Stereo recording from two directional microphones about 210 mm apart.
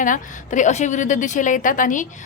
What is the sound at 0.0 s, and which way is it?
A woman's voice, 35° left (ahead or behind).